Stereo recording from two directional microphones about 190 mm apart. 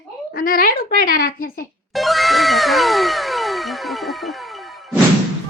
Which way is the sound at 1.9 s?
Centre (ahead or behind).